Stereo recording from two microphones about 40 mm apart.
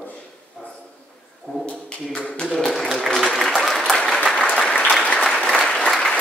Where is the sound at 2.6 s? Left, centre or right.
Centre.